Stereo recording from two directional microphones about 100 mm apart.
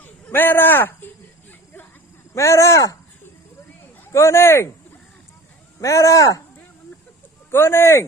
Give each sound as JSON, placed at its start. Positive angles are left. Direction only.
{"t": 0.0, "sound": "a sound", "side_deg": 20}
{"t": 2.3, "sound": "speech", "side_deg": 30}
{"t": 4.1, "sound": "speech", "side_deg": 30}
{"t": 5.8, "sound": "speech", "side_deg": 30}
{"t": 7.5, "sound": "speech", "side_deg": 25}